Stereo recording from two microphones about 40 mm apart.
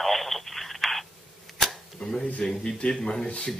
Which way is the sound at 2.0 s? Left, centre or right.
Centre.